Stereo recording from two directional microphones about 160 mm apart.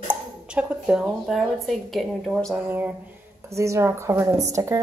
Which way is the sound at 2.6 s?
10° right (ahead or behind).